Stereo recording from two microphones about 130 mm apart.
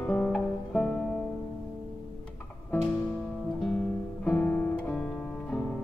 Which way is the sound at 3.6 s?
5° left (ahead or behind).